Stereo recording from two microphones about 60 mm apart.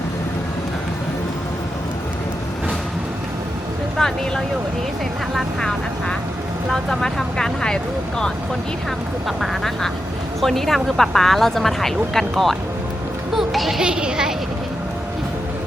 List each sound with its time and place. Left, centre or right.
3.9 s speech: centre
5.5 s speech: centre
9.2 s speech: centre
13.3 s a sound: centre